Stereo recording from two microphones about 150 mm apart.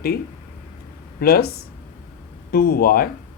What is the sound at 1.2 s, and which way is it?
Speech, 90° left.